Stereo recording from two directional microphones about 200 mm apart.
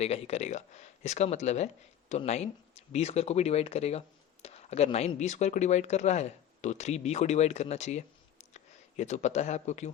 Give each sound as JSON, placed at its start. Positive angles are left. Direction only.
{"t": 0.0, "sound": "speech", "side_deg": 30}